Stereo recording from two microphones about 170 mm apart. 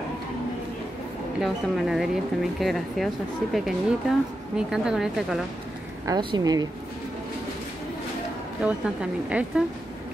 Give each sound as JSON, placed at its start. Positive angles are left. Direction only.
{"t": 1.4, "sound": "speech", "side_deg": 0}
{"t": 6.0, "sound": "a woman's voice", "side_deg": -25}
{"t": 8.6, "sound": "speech", "side_deg": -5}